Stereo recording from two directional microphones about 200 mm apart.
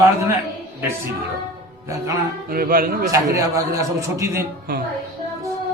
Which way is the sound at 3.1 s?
15° right (ahead or behind).